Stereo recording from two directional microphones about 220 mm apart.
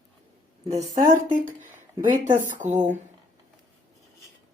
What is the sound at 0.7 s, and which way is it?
Speech, 35° right (ahead or behind).